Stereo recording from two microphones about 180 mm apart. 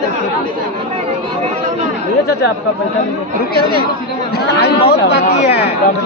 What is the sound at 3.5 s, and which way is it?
Speech, 60° left (ahead or behind).